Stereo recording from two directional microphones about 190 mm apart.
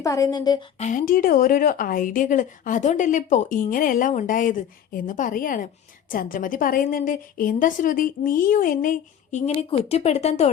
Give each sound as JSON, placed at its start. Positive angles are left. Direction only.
{"t": 0.0, "sound": "a woman's voice", "side_deg": 15}
{"t": 0.8, "sound": "speech", "side_deg": 40}
{"t": 9.5, "sound": "speech", "side_deg": 30}